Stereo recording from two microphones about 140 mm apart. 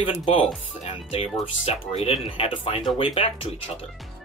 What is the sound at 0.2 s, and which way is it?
Speech, 40° left (ahead or behind).